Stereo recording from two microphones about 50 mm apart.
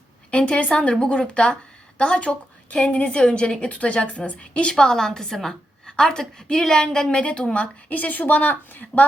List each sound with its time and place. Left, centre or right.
0.3 s a woman's voice: left
4.7 s a woman's voice: centre; by 9.0 s left